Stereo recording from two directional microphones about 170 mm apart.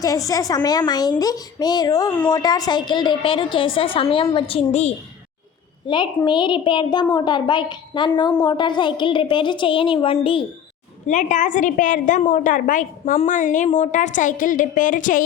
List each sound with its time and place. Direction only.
0.0 s a woman's voice: 20° left (ahead or behind); by 4.9 s 40° left (ahead or behind)
5.9 s a woman's voice: 25° left (ahead or behind)
11.0 s a woman's voice: 45° left (ahead or behind)